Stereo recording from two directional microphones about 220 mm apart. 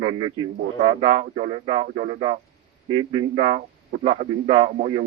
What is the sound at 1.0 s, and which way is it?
A man's voice, 25° right (ahead or behind).